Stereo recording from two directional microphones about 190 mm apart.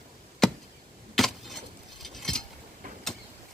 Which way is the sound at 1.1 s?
Centre (ahead or behind).